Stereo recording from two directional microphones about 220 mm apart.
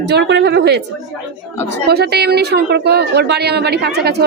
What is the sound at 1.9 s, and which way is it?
A woman's voice, 45° right (ahead or behind).